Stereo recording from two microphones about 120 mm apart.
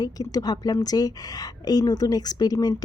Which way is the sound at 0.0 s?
30° left (ahead or behind).